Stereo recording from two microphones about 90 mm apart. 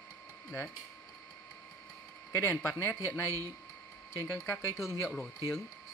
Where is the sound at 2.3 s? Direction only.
25° left (ahead or behind).